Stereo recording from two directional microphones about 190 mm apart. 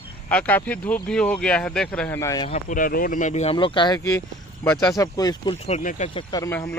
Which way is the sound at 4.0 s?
10° left (ahead or behind).